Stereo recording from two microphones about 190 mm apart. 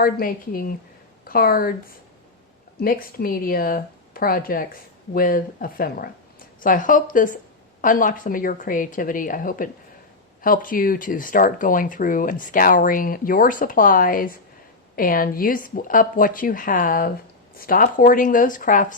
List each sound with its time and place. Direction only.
0.0 s speech: 50° left (ahead or behind)
2.8 s speech: 50° left (ahead or behind)